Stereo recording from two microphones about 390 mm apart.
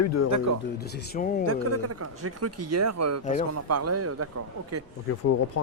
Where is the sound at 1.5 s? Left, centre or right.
Right.